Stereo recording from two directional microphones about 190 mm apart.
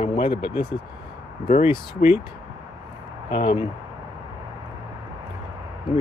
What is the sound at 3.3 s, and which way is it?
Speech, 25° left (ahead or behind).